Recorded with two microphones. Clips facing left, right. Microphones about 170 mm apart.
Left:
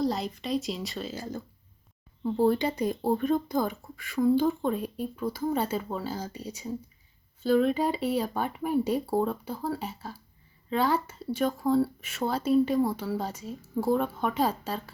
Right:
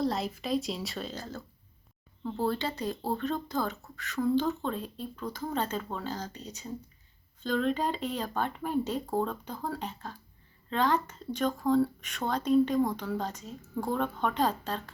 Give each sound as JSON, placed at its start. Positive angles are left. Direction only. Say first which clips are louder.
{"t": 0.0, "sound": "speech", "louder": "left 2 dB", "side_deg": 0}